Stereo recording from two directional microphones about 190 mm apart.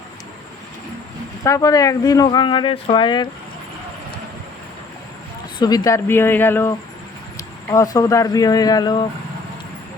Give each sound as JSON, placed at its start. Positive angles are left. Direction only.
{"t": 1.5, "sound": "speech", "side_deg": 20}
{"t": 5.5, "sound": "speech", "side_deg": 20}